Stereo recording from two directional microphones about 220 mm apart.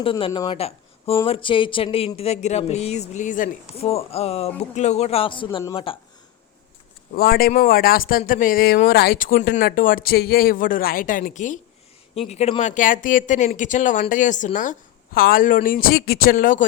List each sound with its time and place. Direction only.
0.0 s speech: 25° left (ahead or behind)
7.2 s speech: 40° left (ahead or behind)